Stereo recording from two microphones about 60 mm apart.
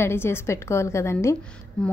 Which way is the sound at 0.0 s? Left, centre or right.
Left.